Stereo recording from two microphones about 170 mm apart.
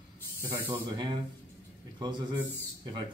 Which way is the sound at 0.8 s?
25° right (ahead or behind).